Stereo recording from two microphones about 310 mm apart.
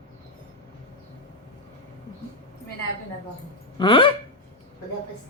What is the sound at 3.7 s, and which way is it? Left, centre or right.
Speech, centre.